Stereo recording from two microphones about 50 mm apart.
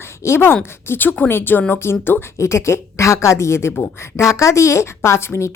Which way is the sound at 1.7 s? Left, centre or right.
Left.